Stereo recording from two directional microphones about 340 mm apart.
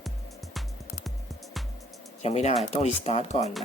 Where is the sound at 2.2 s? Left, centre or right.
Centre.